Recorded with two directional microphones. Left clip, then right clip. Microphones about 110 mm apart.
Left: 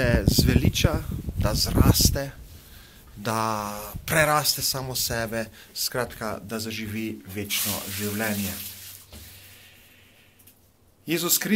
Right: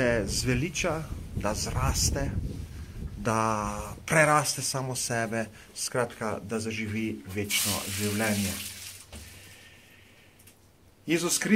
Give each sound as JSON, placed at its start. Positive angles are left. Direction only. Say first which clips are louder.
{"t": 0.0, "sound": "speech", "louder": "left 3 dB", "side_deg": 40}
{"t": 3.2, "sound": "speech", "louder": "left 1 dB", "side_deg": 40}